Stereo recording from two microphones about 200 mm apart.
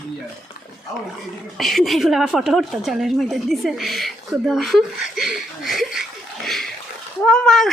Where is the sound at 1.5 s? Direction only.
Centre (ahead or behind).